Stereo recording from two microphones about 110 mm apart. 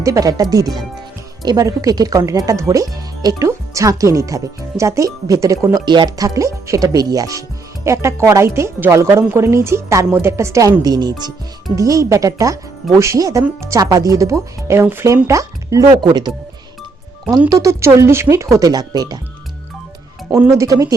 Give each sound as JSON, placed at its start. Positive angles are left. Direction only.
{"t": 0.0, "sound": "speech", "side_deg": -30}
{"t": 5.8, "sound": "speech", "side_deg": -45}
{"t": 15.9, "sound": "speech", "side_deg": -40}
{"t": 17.5, "sound": "speech", "side_deg": -30}
{"t": 20.5, "sound": "speech", "side_deg": -30}